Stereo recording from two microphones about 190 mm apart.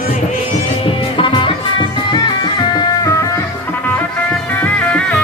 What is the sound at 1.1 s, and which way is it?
Music, 25° left (ahead or behind).